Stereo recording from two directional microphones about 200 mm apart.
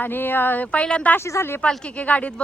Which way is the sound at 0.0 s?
10° left (ahead or behind).